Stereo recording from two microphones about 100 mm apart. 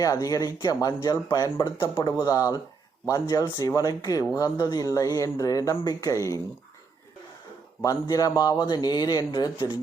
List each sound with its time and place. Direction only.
0.0 s speech: 35° left (ahead or behind)
1.6 s speech: 50° left (ahead or behind); by 6.4 s 35° left (ahead or behind)
8.0 s speech: 40° left (ahead or behind)
9.6 s speech: 55° left (ahead or behind)